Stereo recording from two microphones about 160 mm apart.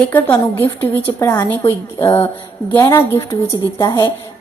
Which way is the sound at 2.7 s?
15° left (ahead or behind).